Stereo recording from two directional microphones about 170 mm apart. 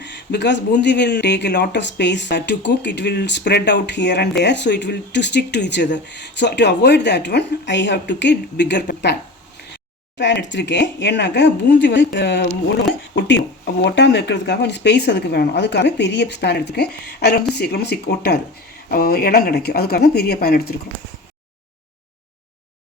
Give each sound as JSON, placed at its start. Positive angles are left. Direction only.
{"t": 0.0, "sound": "speech", "side_deg": 90}
{"t": 10.2, "sound": "speech", "side_deg": 90}